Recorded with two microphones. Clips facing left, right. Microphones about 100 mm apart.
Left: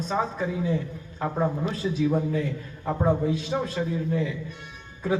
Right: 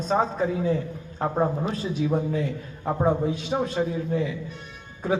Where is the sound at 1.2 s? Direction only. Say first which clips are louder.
Right 2 dB; 30° right (ahead or behind).